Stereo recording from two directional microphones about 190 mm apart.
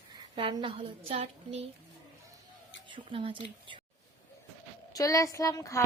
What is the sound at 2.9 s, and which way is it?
Speech, 30° right (ahead or behind).